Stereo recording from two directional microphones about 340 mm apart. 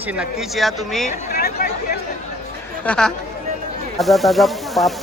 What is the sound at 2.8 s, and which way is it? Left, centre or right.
A man's voice, centre.